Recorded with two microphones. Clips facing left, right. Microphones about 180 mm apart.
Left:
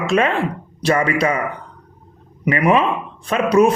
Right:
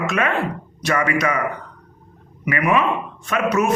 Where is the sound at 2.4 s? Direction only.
30° left (ahead or behind).